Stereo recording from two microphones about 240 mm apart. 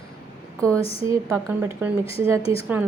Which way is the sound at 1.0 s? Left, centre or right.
Centre.